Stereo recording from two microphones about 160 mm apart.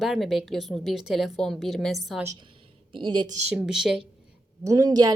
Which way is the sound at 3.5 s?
5° right (ahead or behind).